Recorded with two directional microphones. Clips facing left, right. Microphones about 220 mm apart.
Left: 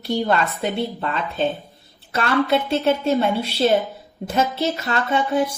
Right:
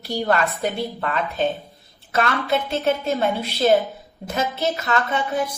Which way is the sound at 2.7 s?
30° left (ahead or behind).